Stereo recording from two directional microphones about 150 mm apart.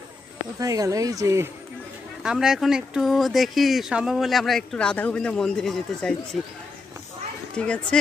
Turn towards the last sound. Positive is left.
turn(degrees=5)  # may be behind; listen again after turning